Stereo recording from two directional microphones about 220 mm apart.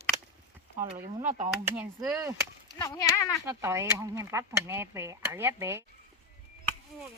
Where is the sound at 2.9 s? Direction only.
15° left (ahead or behind).